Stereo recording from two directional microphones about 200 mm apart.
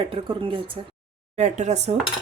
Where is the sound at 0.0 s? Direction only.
25° right (ahead or behind).